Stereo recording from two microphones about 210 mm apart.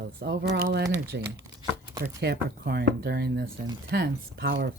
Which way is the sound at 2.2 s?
50° right (ahead or behind).